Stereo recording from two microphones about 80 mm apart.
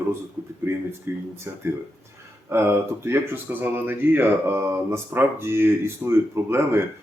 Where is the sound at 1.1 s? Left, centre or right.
Right.